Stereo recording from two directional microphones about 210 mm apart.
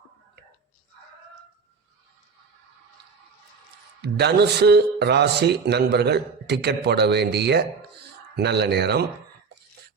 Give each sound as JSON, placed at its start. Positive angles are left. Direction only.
{"t": 4.0, "sound": "speech", "side_deg": -50}